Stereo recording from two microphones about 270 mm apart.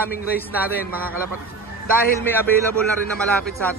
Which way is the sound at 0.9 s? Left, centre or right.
Centre.